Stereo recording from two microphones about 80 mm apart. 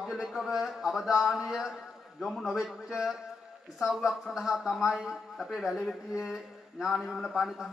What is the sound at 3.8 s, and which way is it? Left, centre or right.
A man's voice, centre.